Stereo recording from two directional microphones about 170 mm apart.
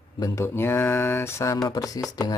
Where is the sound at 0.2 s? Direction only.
15° left (ahead or behind).